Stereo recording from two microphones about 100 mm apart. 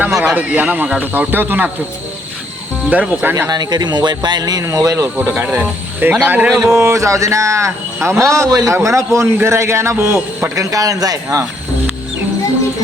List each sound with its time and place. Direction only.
0.1 s speech: 5° right (ahead or behind)
2.9 s speech: 15° right (ahead or behind)
3.5 s speech: 45° right (ahead or behind)
4.6 s a sound: 35° right (ahead or behind)
5.4 s a man's voice: 20° right (ahead or behind)
6.6 s a sound: 25° right (ahead or behind)
8.0 s a man's voice: 30° right (ahead or behind)